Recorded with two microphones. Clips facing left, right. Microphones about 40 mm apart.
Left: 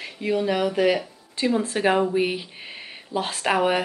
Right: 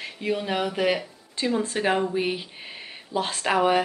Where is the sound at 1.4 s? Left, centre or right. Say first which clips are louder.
Left 2 dB; centre.